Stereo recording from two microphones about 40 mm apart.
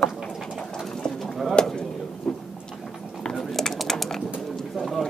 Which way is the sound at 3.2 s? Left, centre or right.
Centre.